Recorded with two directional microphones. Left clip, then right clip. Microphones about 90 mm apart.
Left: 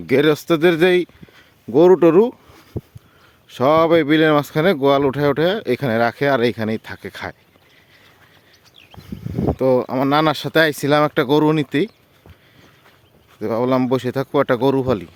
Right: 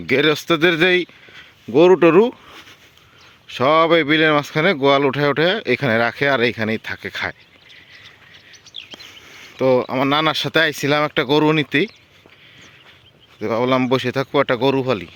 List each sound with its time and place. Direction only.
0.1 s speech: 45° left (ahead or behind)
2.0 s speech: 45° left (ahead or behind)
3.5 s speech: 40° left (ahead or behind)
5.8 s speech: 35° left (ahead or behind)
9.6 s speech: 70° left (ahead or behind)
11.5 s speech: 50° left (ahead or behind)
13.4 s speech: 65° left (ahead or behind); by 14.9 s 85° left